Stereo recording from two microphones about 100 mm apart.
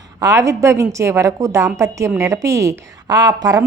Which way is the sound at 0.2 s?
35° right (ahead or behind).